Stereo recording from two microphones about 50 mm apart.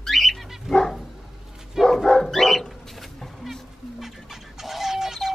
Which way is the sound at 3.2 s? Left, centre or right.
Centre.